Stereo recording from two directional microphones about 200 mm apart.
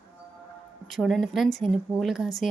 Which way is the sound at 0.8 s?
Centre (ahead or behind).